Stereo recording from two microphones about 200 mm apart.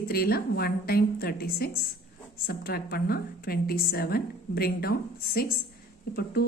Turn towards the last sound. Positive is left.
turn(degrees=50)  # may be behind; listen again after turning